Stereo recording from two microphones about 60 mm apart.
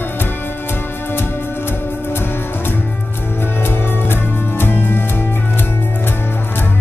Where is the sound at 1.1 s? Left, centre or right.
Left.